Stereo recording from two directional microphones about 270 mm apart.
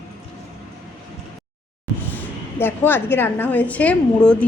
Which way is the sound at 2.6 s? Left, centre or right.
Centre.